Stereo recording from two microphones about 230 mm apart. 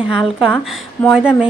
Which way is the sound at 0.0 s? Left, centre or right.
Centre.